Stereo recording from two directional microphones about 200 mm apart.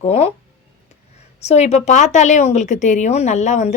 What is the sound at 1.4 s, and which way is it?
A woman's voice, 35° left (ahead or behind).